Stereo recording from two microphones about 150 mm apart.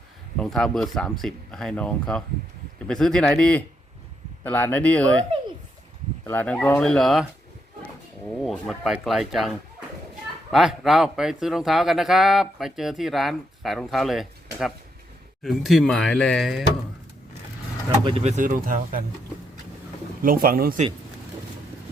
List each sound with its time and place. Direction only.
0.3 s a man's voice: centre (ahead or behind)
6.2 s speech: 10° left (ahead or behind)
8.4 s a man's voice: centre (ahead or behind)
18.0 s speech: 40° right (ahead or behind); by 19.0 s 65° right (ahead or behind)
20.2 s speech: 75° right (ahead or behind)